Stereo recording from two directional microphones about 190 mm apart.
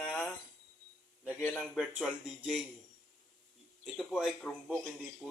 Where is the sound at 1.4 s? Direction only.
5° left (ahead or behind).